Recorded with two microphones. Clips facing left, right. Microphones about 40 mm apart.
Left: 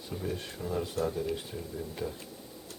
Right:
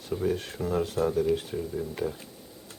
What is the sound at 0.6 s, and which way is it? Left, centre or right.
Speech, right.